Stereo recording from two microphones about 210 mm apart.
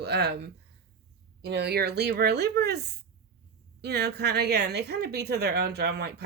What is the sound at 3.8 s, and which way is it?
Speech, 50° right (ahead or behind).